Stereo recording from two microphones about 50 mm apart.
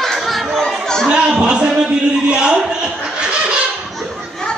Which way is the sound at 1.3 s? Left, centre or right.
Right.